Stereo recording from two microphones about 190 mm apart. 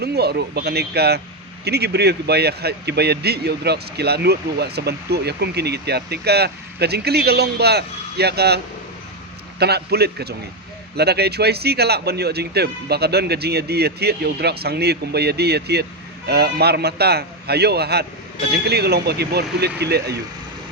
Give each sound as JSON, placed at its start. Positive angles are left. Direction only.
{"t": 0.0, "sound": "speech", "side_deg": -60}